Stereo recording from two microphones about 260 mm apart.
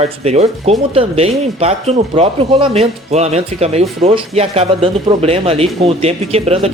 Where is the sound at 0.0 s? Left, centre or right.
Right.